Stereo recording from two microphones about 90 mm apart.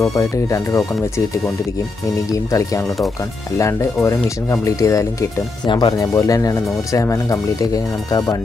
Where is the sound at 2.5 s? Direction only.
35° left (ahead or behind).